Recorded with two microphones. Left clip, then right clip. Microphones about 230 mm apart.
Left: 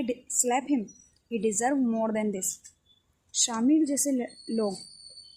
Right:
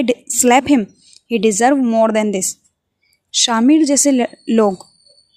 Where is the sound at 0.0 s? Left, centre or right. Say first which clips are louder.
Right 14 dB; right.